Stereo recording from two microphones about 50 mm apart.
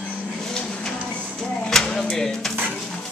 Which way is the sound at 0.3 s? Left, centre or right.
Centre.